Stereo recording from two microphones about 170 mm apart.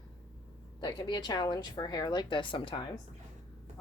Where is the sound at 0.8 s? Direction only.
25° left (ahead or behind).